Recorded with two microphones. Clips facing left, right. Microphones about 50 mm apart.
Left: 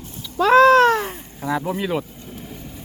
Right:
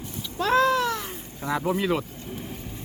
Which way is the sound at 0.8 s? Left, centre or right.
Left.